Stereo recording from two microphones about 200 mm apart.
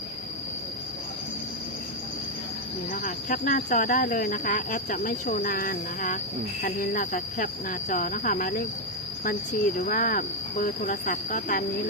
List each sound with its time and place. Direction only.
2.9 s speech: 40° left (ahead or behind)